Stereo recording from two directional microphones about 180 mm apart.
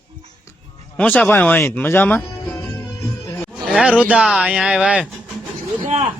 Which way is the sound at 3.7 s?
5° right (ahead or behind).